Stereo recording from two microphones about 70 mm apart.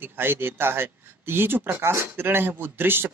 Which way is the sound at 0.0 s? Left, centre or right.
Right.